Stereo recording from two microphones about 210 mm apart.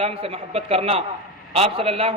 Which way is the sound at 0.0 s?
25° right (ahead or behind).